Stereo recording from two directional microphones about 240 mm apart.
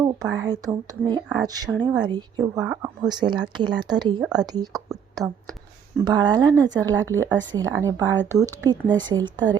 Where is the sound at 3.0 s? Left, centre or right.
Centre.